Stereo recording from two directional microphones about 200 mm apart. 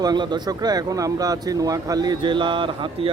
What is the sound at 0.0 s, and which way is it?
Speech, 20° right (ahead or behind).